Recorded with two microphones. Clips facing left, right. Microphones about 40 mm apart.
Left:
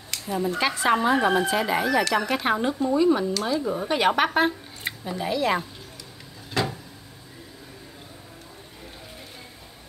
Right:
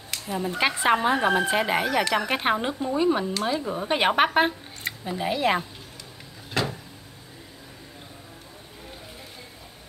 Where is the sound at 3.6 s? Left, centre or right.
Centre.